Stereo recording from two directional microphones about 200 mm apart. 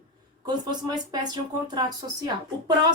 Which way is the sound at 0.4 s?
20° right (ahead or behind).